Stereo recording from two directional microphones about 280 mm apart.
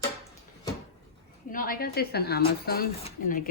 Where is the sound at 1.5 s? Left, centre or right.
Left.